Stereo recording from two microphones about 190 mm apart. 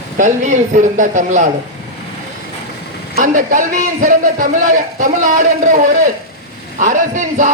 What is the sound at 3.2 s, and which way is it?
A man's voice, 45° right (ahead or behind).